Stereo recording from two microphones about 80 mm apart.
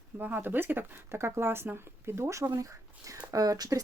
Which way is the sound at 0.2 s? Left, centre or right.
Right.